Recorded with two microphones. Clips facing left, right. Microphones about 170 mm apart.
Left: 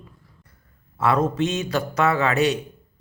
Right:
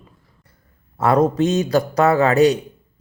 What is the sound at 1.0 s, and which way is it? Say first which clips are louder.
Speech: right 5 dB; 40° right (ahead or behind).